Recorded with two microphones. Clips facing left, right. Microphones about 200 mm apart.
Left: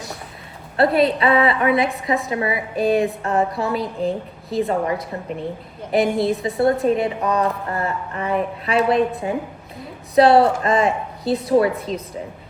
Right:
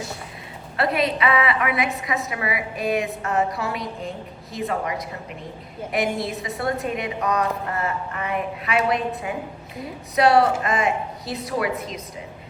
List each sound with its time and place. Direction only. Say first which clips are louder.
0.8 s a woman's voice: left 6 dB; 30° left (ahead or behind)